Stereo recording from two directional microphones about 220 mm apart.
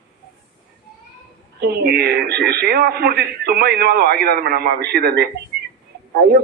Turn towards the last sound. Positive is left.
turn(degrees=-45)  # may be behind; listen again after turning